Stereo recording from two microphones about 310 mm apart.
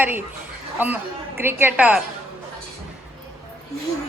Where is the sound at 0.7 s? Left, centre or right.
Centre.